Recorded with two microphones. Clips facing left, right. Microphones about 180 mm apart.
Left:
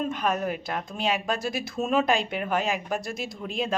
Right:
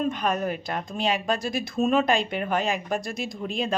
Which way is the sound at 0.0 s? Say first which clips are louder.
Right 1 dB; 5° left (ahead or behind).